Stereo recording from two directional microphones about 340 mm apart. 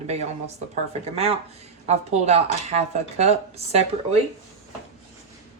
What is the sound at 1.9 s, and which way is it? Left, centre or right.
Speech, centre.